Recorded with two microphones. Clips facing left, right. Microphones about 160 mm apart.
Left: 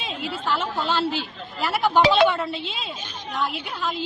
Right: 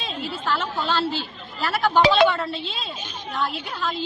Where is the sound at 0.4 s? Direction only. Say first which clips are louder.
Even; 15° left (ahead or behind).